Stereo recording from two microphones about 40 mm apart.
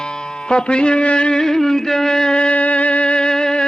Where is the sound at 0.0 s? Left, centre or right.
Left.